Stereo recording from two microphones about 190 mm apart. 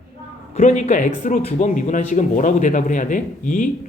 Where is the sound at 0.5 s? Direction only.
40° left (ahead or behind).